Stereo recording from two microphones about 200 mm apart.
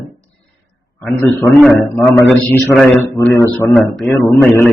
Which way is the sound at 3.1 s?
15° left (ahead or behind).